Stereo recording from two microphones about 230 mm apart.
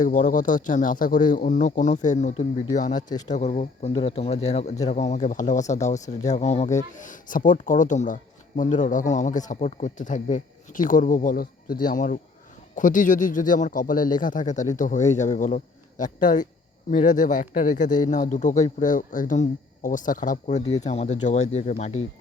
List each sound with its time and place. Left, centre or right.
0.0 s speech: left